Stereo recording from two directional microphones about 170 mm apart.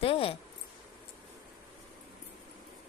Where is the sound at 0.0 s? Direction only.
35° left (ahead or behind).